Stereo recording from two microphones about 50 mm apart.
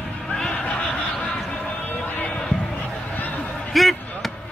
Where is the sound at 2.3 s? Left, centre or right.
Centre.